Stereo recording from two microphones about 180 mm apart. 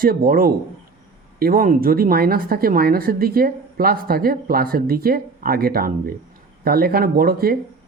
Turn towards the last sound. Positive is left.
turn(degrees=-55)  # may be behind; listen again after turning